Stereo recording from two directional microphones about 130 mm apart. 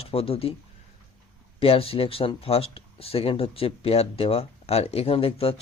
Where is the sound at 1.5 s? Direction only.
45° left (ahead or behind).